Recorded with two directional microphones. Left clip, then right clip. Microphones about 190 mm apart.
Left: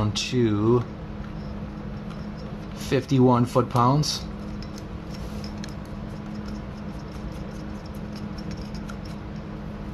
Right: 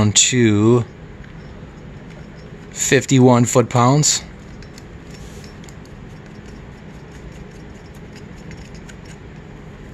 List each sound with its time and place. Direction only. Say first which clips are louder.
0.0 s speech: right 10 dB; 60° right (ahead or behind)
2.8 s speech: right 8 dB; 60° right (ahead or behind)